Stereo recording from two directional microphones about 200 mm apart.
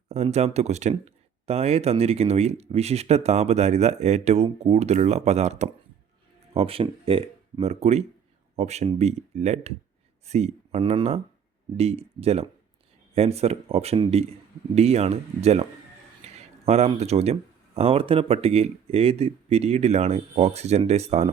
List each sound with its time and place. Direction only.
0.1 s speech: 35° right (ahead or behind)
16.2 s a sound: 35° right (ahead or behind)
17.7 s speech: 30° right (ahead or behind)